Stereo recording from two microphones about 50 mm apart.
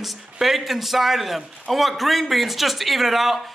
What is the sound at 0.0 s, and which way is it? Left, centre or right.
Speech, centre.